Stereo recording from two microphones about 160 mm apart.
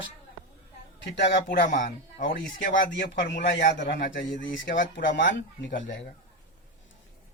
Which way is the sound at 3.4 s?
90° left.